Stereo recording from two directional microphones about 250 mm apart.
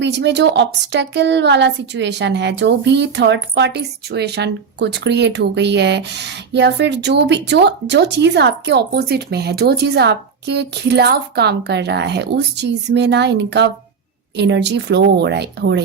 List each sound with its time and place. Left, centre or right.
0.0 s a woman's voice: right